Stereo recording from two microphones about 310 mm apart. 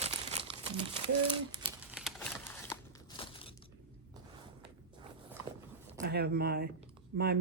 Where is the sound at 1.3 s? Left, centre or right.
Centre.